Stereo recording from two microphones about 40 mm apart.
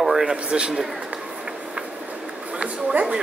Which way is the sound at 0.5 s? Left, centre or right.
Right.